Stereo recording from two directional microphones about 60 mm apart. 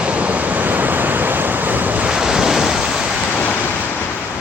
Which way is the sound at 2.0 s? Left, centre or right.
Centre.